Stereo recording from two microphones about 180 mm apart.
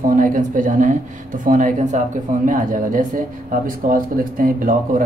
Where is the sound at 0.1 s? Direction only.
50° right (ahead or behind).